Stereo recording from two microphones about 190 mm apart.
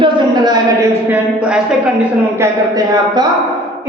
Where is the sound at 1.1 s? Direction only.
5° right (ahead or behind).